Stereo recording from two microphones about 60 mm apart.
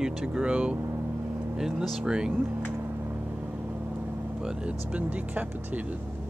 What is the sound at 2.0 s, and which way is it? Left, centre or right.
Speech, centre.